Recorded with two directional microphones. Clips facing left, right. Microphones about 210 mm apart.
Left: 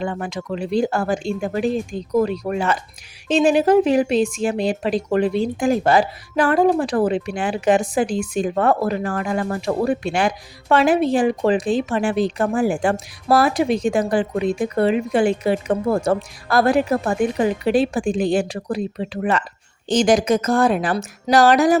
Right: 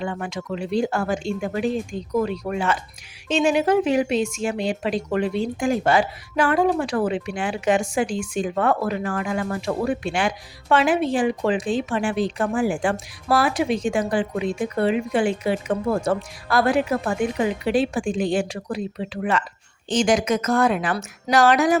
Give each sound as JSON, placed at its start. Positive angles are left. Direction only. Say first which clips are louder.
{"t": 0.0, "sound": "speech", "louder": "left 3 dB", "side_deg": 35}